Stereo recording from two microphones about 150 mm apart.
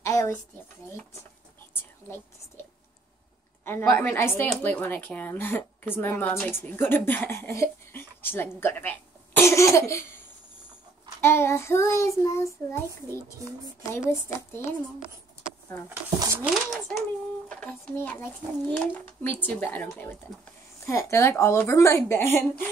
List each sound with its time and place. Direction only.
0.0 s a sound: 20° left (ahead or behind)
2.0 s speech: 15° left (ahead or behind)
3.6 s speech: 15° left (ahead or behind)
11.1 s speech: 15° left (ahead or behind)
16.4 s a woman's voice: centre (ahead or behind); by 22.4 s 15° left (ahead or behind)